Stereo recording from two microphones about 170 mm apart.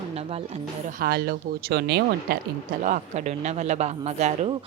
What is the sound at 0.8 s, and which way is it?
A woman's voice, 60° right (ahead or behind).